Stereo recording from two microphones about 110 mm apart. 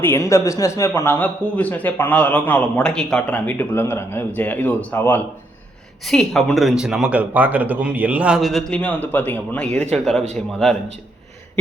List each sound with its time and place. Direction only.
0.0 s a man's voice: 25° left (ahead or behind)
1.2 s a man's voice: 15° left (ahead or behind)
6.1 s speech: 5° left (ahead or behind); by 8.4 s 15° right (ahead or behind)
8.4 s a man's voice: centre (ahead or behind)
8.8 s a man's voice: 15° left (ahead or behind)